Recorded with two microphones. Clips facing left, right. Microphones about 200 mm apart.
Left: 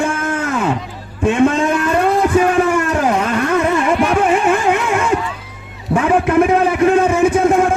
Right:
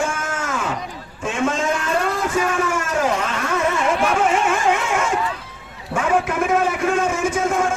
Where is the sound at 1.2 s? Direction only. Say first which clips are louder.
Left 8 dB; 60° left (ahead or behind).